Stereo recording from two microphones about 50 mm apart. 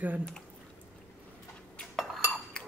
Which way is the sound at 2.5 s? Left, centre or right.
Centre.